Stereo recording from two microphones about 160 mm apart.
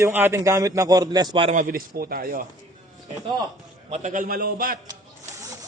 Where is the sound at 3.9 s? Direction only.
50° right (ahead or behind).